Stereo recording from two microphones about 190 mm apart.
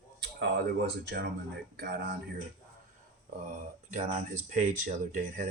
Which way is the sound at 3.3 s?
45° right (ahead or behind).